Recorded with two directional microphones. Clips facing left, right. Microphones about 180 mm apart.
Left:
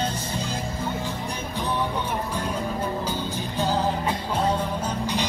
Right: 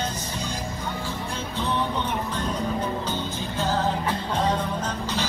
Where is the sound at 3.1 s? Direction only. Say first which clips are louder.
Even; 10° left (ahead or behind).